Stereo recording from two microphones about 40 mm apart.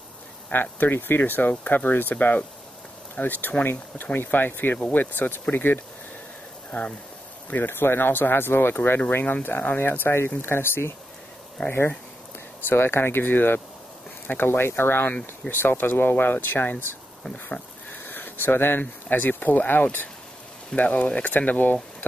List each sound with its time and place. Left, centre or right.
0.5 s speech: left
3.6 s speech: left
6.7 s speech: left
7.4 s speech: left
9.2 s speech: left
9.8 s speech: left
11.6 s speech: left
12.6 s speech: left
15.4 s speech: left
15.8 s speech: left
17.9 s a sound: left
18.8 s speech: left
20.7 s speech: left